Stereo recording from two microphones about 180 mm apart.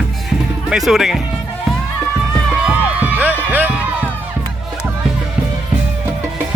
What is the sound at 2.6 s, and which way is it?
Music, 10° right (ahead or behind).